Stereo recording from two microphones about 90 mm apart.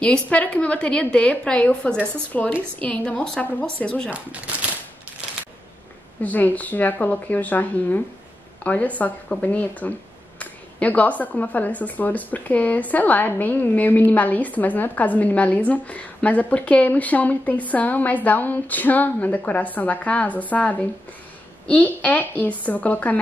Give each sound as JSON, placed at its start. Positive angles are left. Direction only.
{"t": 0.0, "sound": "speech", "side_deg": 15}
{"t": 4.1, "sound": "speech", "side_deg": -15}
{"t": 6.2, "sound": "speech", "side_deg": 20}